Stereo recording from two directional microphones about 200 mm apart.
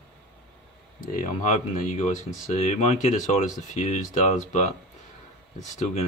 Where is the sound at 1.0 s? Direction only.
45° left (ahead or behind).